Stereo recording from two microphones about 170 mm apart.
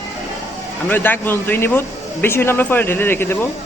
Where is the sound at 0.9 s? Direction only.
10° left (ahead or behind).